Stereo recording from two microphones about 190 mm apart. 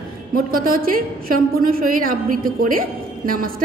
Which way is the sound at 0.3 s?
50° right (ahead or behind).